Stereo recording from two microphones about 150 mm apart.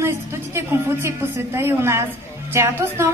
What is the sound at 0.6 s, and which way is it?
A woman's voice, 15° right (ahead or behind).